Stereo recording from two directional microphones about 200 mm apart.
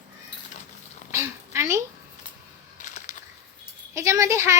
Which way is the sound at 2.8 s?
40° left (ahead or behind).